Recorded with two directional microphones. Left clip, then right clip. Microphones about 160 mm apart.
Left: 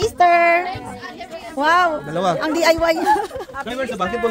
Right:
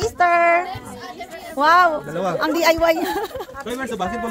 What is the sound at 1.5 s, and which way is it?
A woman's voice, 5° right (ahead or behind).